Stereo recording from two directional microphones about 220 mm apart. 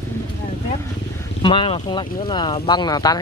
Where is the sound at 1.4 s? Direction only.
25° left (ahead or behind).